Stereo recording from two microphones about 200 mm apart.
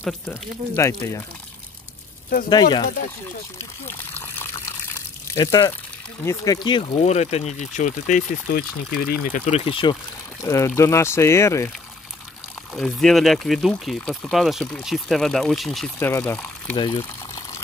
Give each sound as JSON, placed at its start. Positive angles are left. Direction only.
{"t": 0.3, "sound": "speech", "side_deg": 15}
{"t": 2.5, "sound": "speech", "side_deg": 20}
{"t": 4.0, "sound": "water", "side_deg": 10}
{"t": 5.3, "sound": "speech", "side_deg": 20}
{"t": 9.5, "sound": "speech", "side_deg": 25}
{"t": 10.4, "sound": "speech", "side_deg": 15}
{"t": 12.7, "sound": "speech", "side_deg": 0}
{"t": 16.0, "sound": "speech", "side_deg": 10}
{"t": 16.7, "sound": "speech", "side_deg": 25}
{"t": 17.0, "sound": "water", "side_deg": 15}